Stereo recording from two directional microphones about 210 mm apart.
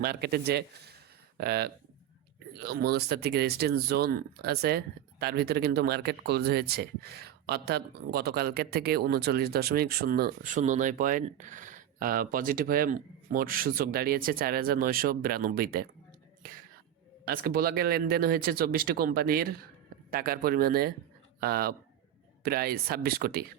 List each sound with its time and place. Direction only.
0.0 s speech: 50° right (ahead or behind)
17.2 s speech: 45° right (ahead or behind)